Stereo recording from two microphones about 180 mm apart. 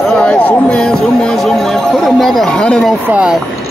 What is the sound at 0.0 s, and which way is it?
Speech, 5° left (ahead or behind).